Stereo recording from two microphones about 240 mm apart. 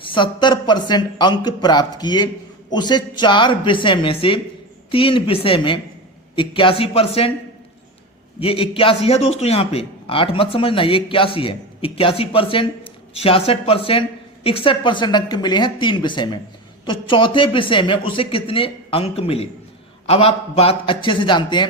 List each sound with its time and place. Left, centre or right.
0.0 s a man's voice: centre
8.4 s a man's voice: left